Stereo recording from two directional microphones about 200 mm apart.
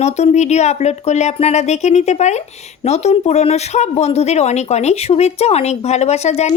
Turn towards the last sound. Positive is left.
turn(degrees=35)  # may be behind; listen again after turning